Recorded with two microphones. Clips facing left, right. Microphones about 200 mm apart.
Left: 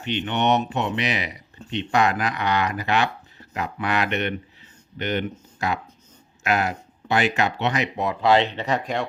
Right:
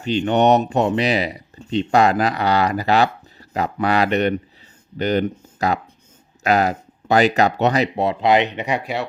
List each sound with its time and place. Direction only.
0.0 s speech: 40° right (ahead or behind); by 9.0 s 5° right (ahead or behind)